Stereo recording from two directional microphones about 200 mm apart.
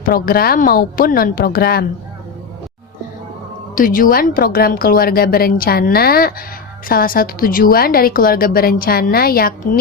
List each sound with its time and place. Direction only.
0.0 s a woman's voice: 50° left (ahead or behind)
3.8 s a woman's voice: 45° left (ahead or behind)